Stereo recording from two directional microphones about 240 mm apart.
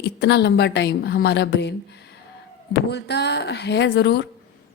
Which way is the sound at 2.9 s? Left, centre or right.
Left.